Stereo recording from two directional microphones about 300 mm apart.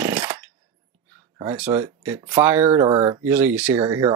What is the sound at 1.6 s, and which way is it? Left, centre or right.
Speech, centre.